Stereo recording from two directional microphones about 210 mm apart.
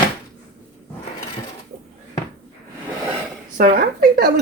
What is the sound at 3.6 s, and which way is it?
Speech, 45° right (ahead or behind).